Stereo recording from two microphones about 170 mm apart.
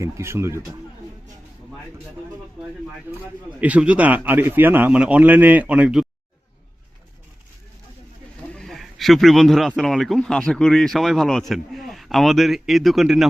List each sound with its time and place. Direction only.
0.0 s a man's voice: 15° right (ahead or behind)
3.1 s a man's voice: 10° right (ahead or behind)
8.5 s a man's voice: centre (ahead or behind)